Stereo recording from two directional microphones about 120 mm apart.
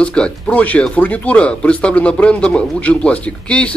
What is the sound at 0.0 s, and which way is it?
Speech, 10° left (ahead or behind).